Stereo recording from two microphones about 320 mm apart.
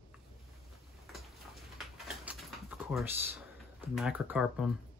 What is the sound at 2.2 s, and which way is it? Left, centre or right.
Typing, centre.